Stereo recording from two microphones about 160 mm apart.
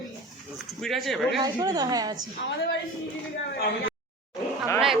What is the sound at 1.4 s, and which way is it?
Speech, 25° right (ahead or behind).